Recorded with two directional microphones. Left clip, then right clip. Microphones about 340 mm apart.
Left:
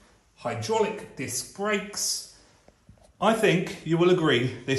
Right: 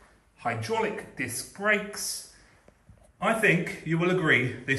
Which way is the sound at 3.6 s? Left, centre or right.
Centre.